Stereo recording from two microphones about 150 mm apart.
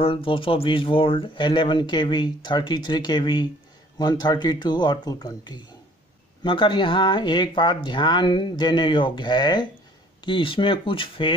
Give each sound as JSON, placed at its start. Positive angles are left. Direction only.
{"t": 0.0, "sound": "speech", "side_deg": 35}